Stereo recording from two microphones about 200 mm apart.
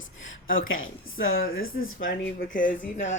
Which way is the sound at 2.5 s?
40° left (ahead or behind).